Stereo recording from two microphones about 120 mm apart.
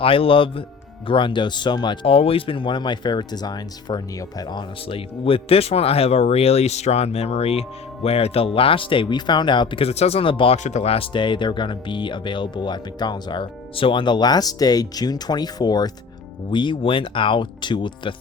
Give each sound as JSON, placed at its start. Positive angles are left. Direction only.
{"t": 0.0, "sound": "speech", "side_deg": 50}
{"t": 10.6, "sound": "speech", "side_deg": 70}